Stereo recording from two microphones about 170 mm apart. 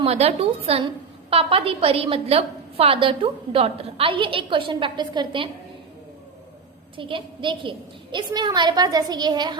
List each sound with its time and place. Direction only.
0.0 s a woman's voice: 35° right (ahead or behind)
6.9 s a woman's voice: 30° right (ahead or behind)